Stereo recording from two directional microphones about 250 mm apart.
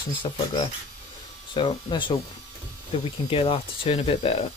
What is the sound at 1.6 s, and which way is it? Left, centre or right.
Speech, centre.